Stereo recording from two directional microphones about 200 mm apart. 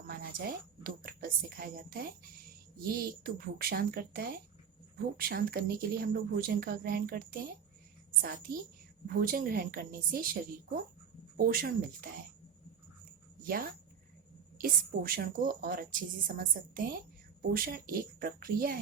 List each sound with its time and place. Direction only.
0.1 s a woman's voice: 45° right (ahead or behind)
11.3 s a woman's voice: 45° right (ahead or behind)
13.4 s a woman's voice: 45° right (ahead or behind)